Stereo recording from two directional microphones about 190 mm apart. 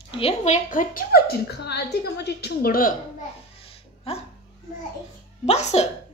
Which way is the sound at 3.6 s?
30° left (ahead or behind).